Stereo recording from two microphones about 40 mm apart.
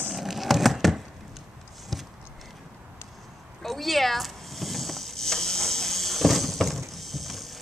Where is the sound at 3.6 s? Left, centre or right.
Centre.